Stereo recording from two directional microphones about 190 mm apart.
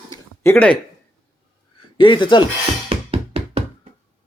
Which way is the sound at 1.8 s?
25° left (ahead or behind).